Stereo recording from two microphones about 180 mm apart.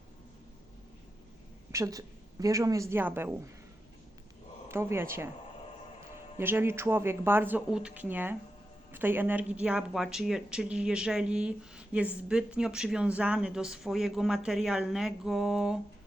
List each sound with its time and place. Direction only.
1.7 s speech: 15° right (ahead or behind)
4.7 s speech: 15° right (ahead or behind)
6.3 s speech: 10° right (ahead or behind)